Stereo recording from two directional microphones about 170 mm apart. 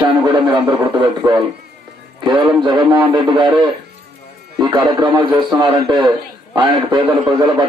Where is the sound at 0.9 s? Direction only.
25° right (ahead or behind).